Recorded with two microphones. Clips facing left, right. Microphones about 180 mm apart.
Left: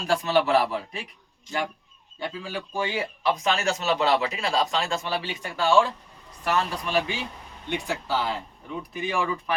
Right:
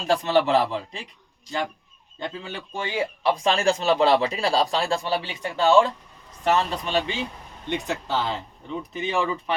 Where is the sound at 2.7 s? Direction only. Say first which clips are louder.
Right 2 dB; 20° right (ahead or behind).